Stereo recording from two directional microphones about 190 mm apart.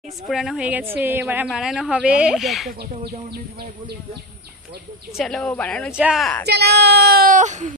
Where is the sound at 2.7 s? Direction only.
55° right (ahead or behind).